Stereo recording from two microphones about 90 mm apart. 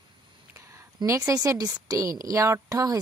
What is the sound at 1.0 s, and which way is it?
A woman's voice, 35° right (ahead or behind).